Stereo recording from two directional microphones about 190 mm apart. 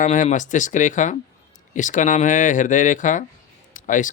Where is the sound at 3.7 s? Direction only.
40° left (ahead or behind).